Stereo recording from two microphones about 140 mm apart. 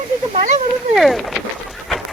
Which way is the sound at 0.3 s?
50° right (ahead or behind).